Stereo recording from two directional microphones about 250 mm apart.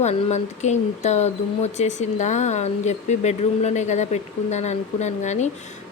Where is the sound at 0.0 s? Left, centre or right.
Left.